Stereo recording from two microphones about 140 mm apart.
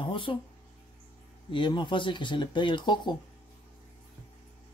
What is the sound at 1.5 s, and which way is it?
Speech, 35° left (ahead or behind).